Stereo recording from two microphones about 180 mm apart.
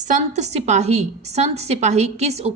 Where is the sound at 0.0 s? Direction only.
40° right (ahead or behind).